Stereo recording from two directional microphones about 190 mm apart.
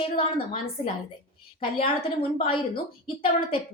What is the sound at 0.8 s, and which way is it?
Speech, 25° left (ahead or behind).